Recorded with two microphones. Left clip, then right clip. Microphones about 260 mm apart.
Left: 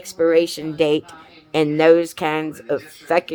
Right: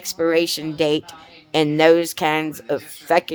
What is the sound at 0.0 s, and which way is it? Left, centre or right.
Speech, centre.